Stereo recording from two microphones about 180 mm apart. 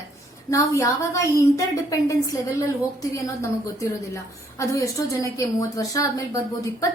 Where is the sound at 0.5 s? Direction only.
15° left (ahead or behind).